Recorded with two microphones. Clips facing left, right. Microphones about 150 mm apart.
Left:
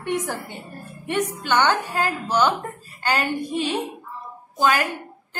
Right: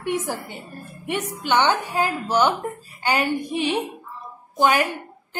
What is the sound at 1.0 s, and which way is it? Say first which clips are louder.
A woman's voice: left 2 dB; 10° right (ahead or behind).